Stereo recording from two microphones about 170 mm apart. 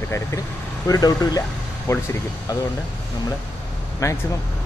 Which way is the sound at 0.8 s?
20° left (ahead or behind).